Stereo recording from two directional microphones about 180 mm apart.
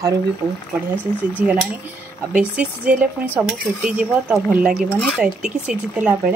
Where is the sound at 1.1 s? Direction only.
25° left (ahead or behind).